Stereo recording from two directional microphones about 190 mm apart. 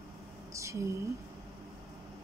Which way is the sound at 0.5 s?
15° right (ahead or behind).